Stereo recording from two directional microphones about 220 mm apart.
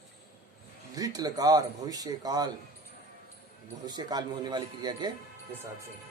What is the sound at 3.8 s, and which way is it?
A man's voice, 20° right (ahead or behind).